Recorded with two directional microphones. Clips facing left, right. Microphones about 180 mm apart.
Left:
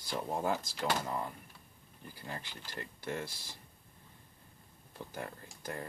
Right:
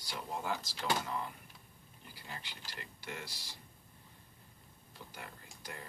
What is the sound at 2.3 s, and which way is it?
Speech, 45° left (ahead or behind).